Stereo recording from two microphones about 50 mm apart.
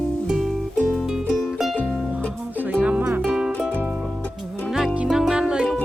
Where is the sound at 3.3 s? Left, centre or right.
Centre.